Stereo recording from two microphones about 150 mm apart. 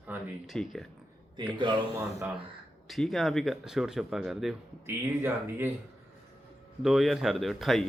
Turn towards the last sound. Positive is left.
turn(degrees=0)  # may be behind; listen again after turning